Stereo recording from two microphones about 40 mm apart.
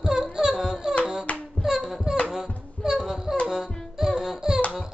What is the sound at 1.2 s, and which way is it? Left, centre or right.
Hands, left.